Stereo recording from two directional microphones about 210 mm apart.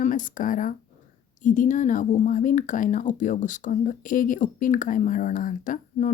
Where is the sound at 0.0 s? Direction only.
40° left (ahead or behind).